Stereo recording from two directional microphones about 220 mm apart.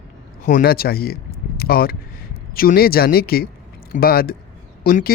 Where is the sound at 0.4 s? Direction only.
40° left (ahead or behind).